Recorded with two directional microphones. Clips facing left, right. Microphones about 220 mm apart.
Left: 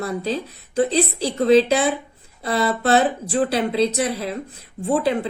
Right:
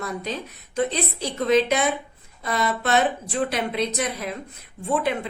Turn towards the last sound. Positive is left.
turn(degrees=35)  # may be behind; listen again after turning